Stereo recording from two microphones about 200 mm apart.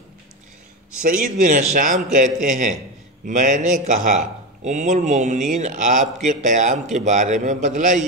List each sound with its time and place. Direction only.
1.2 s speech: 40° right (ahead or behind)